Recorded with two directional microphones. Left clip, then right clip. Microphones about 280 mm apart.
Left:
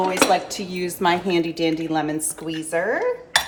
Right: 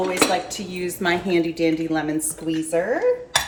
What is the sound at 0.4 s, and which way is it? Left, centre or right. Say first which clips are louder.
A woman's voice: left 1 dB; left.